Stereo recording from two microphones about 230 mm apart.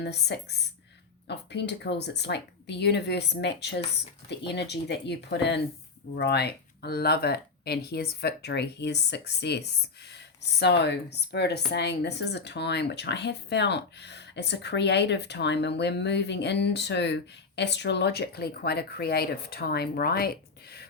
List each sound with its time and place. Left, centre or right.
0.0 s speech: left